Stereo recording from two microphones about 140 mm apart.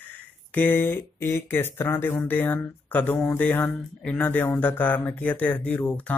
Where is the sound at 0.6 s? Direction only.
15° left (ahead or behind).